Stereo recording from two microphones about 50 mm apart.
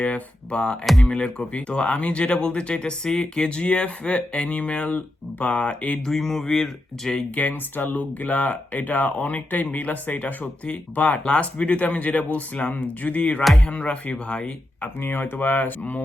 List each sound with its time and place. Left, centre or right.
0.0 s speech: left
0.9 s speech: centre
1.1 s speech: left
6.1 s speech: centre
7.3 s speech: left
15.0 s speech: left